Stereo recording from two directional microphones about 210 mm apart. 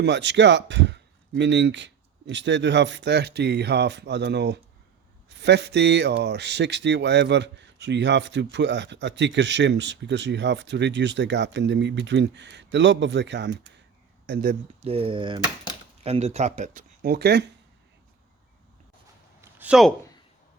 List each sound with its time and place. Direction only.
0.0 s speech: 55° right (ahead or behind)
14.8 s speech: 30° right (ahead or behind); by 17.4 s 50° right (ahead or behind)
19.4 s a sound: 5° right (ahead or behind)